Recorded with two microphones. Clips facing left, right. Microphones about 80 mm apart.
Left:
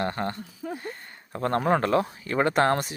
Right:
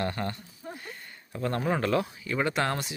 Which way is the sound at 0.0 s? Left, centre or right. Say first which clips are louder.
Left 3 dB; left.